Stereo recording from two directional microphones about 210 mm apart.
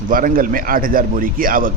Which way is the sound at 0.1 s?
40° right (ahead or behind).